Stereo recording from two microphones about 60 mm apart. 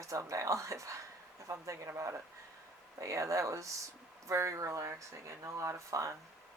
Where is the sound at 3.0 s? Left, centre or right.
Right.